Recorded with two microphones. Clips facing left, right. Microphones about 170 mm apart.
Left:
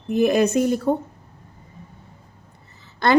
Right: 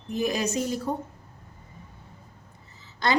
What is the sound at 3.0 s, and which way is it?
Speech, 55° left (ahead or behind).